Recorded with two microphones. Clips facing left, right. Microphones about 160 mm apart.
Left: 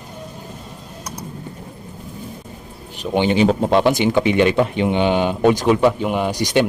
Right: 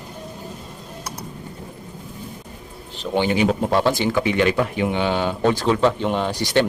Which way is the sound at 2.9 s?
20° left (ahead or behind).